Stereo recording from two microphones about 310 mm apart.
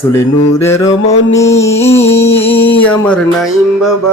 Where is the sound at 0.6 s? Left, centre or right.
Centre.